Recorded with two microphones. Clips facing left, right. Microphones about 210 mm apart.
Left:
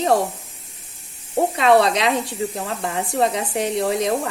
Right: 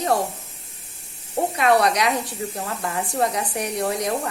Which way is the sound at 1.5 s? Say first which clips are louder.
Left 2 dB; 25° left (ahead or behind).